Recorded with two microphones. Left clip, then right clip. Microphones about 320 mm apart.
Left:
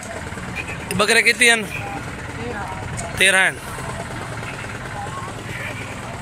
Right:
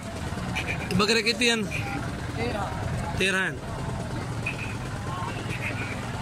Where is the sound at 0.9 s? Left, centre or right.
Centre.